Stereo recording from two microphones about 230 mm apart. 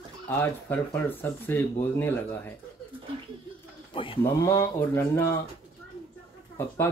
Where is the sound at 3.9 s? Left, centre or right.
Left.